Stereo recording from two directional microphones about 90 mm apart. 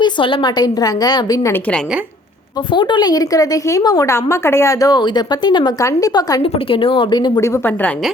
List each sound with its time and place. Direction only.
0.0 s a woman's voice: 60° left (ahead or behind); by 1.5 s 45° left (ahead or behind)
2.7 s a woman's voice: 60° left (ahead or behind); by 4.1 s 45° left (ahead or behind)
4.1 s a woman's voice: 30° left (ahead or behind); by 5.7 s 55° left (ahead or behind)
5.8 s a woman's voice: 40° left (ahead or behind)
6.4 s a woman's voice: 80° left; by 7.4 s 50° left (ahead or behind)
7.4 s a woman's voice: 30° left (ahead or behind)